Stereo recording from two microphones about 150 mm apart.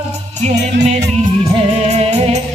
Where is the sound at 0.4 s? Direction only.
50° right (ahead or behind).